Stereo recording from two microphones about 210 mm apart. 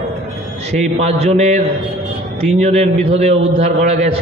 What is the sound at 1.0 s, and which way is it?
Speech, 30° right (ahead or behind).